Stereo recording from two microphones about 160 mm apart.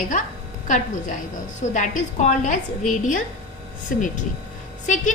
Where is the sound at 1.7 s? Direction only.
50° left (ahead or behind).